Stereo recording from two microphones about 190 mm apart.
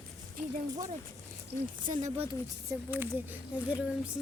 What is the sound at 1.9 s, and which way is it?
Speech, 35° right (ahead or behind).